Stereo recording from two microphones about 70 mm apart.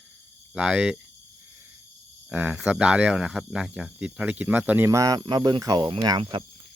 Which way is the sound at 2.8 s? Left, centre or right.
Centre.